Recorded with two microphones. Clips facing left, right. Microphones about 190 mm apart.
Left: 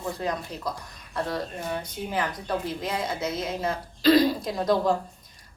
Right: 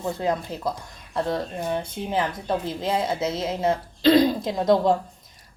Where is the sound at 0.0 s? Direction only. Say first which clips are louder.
Right 4 dB; 25° right (ahead or behind).